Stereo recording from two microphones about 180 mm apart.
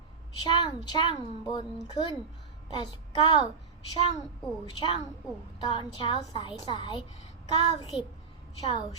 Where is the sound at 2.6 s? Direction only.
25° left (ahead or behind).